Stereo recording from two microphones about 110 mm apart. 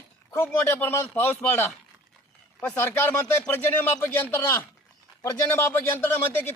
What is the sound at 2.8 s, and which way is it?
Speech, 20° left (ahead or behind).